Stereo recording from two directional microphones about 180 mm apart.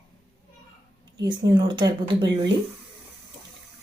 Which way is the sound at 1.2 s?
25° right (ahead or behind).